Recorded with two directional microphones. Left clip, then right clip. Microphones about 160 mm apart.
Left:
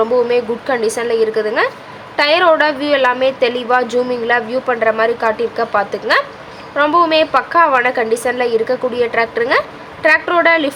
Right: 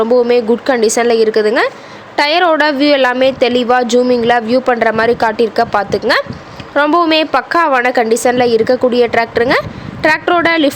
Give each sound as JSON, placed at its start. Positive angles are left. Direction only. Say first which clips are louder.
{"t": 0.0, "sound": "a woman's voice", "louder": "right 3 dB", "side_deg": -45}